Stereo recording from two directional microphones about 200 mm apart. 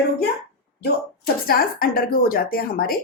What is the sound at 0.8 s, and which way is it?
Speech, 50° left (ahead or behind).